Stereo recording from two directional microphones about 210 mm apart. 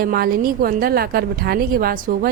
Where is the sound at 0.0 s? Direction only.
45° right (ahead or behind).